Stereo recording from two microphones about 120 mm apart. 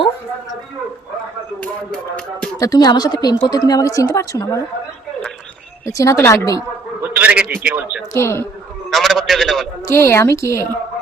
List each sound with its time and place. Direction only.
1.6 s music: 10° left (ahead or behind)
2.6 s a woman's voice: 30° left (ahead or behind)
5.8 s a woman's voice: 30° left (ahead or behind)
7.0 s a man's voice: 15° right (ahead or behind)
8.1 s a woman's voice: 20° left (ahead or behind)
8.9 s a man's voice: centre (ahead or behind)
9.8 s a woman's voice: 20° left (ahead or behind)